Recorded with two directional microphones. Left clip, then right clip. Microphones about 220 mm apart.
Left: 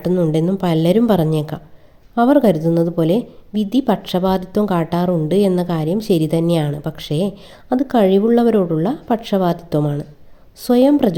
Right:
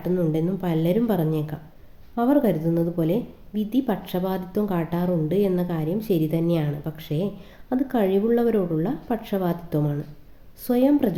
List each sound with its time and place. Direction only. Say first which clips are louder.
0.0 s a woman's voice: left 7 dB; 40° left (ahead or behind)